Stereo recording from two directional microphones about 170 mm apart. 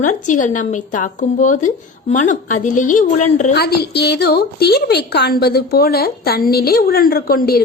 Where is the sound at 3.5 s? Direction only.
70° left (ahead or behind).